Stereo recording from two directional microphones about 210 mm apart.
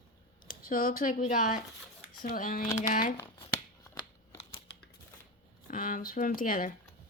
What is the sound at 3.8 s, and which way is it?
Scissors, 15° left (ahead or behind).